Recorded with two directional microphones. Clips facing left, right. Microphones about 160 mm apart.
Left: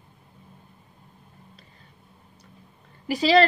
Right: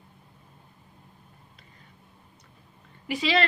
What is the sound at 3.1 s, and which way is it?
Speech, 40° left (ahead or behind).